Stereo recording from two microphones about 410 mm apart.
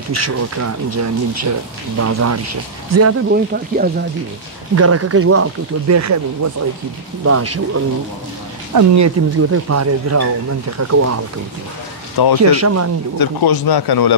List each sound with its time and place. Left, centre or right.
0.1 s speech: right
3.5 s speech: right
4.7 s speech: right
12.4 s speech: right
13.2 s speech: left